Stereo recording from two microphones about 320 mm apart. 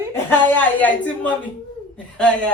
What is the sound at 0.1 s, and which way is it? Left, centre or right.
A woman's voice, centre.